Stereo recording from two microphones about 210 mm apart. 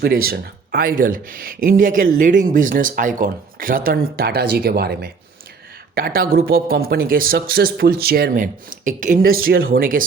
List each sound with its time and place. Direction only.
0.3 s a man's voice: 45° right (ahead or behind)